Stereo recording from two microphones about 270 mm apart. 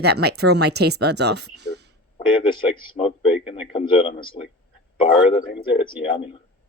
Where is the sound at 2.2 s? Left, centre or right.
Centre.